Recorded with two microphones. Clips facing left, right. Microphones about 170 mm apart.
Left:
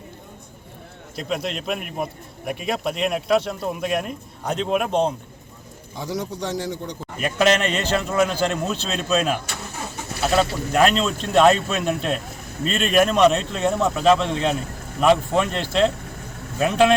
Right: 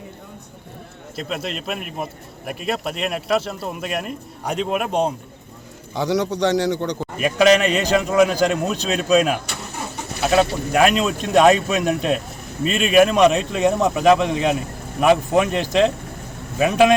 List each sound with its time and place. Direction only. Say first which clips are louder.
1.1 s a man's voice: left 1 dB; centre (ahead or behind)
5.9 s a man's voice: right 8 dB; 75° right (ahead or behind)
7.2 s a man's voice: right 4 dB; 10° right (ahead or behind)